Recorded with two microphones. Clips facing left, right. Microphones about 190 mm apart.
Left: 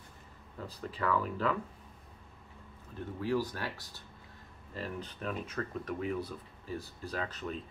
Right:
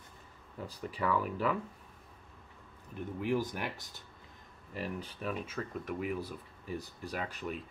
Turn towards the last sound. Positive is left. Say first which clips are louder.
# left 1 dB
turn(degrees=-10)  # may be behind; listen again after turning